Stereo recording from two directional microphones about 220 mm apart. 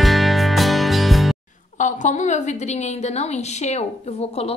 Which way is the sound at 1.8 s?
35° left (ahead or behind).